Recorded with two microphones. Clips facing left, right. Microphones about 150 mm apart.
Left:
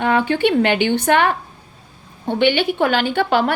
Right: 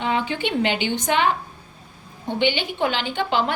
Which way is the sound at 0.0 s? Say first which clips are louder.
Left 7 dB; 55° left (ahead or behind).